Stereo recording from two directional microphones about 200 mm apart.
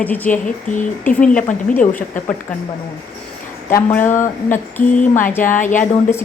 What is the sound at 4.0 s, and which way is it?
Speech, 40° left (ahead or behind).